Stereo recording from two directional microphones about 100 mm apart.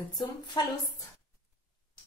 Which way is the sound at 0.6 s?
45° left (ahead or behind).